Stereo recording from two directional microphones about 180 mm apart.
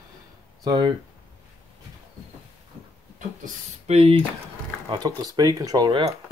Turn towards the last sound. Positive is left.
turn(degrees=-25)  # may be behind; listen again after turning